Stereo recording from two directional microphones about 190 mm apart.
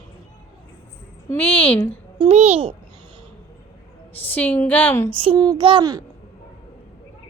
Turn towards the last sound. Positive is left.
turn(degrees=-25)  # may be behind; listen again after turning